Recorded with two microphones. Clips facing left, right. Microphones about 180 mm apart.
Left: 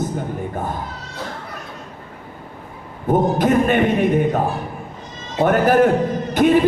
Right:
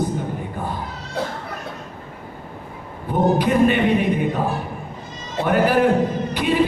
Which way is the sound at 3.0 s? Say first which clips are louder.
Left 2 dB; 45° left (ahead or behind).